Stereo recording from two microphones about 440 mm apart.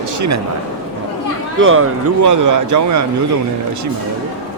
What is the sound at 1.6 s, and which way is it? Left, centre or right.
Speech, right.